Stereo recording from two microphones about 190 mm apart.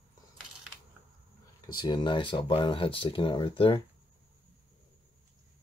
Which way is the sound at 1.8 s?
20° left (ahead or behind).